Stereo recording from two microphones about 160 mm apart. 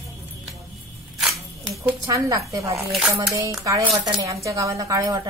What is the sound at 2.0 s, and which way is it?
Speech, 20° right (ahead or behind).